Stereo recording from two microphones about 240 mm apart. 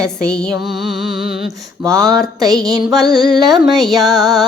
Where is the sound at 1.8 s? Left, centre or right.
Centre.